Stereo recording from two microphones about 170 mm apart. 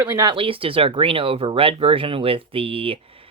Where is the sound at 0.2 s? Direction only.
30° right (ahead or behind).